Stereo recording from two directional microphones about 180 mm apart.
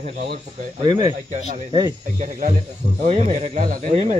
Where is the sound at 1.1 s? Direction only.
45° right (ahead or behind).